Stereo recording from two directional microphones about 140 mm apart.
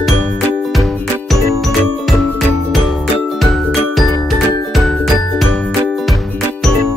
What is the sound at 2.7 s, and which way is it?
Music, centre (ahead or behind).